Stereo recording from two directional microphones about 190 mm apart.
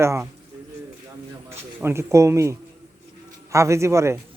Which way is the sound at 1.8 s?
15° right (ahead or behind).